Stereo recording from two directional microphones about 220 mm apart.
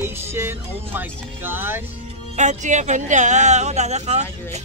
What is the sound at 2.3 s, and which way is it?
Speech, 35° right (ahead or behind).